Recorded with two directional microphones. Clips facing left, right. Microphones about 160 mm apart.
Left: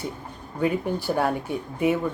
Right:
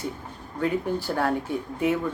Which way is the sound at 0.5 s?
15° left (ahead or behind).